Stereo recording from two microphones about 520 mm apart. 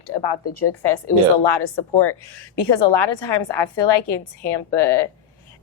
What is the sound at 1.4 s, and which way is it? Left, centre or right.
A woman's voice, left.